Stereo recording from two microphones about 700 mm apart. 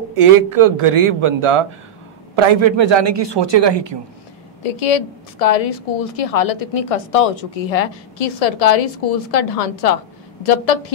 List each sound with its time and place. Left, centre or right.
0.2 s a man's voice: right
4.6 s a woman's voice: left